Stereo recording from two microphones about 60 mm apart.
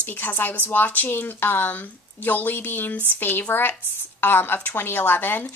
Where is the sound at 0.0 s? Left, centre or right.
Left.